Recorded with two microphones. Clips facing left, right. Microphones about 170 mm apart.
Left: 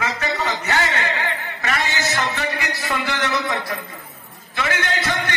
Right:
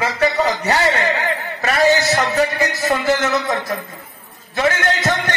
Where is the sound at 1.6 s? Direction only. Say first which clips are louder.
Right 10 dB; 35° right (ahead or behind).